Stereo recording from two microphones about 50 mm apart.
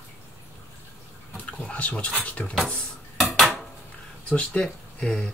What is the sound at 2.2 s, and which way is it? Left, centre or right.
Speech, left.